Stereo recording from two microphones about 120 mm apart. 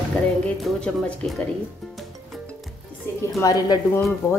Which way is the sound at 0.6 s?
5° left (ahead or behind).